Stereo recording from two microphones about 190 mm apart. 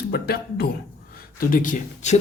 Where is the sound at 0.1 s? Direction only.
55° left (ahead or behind).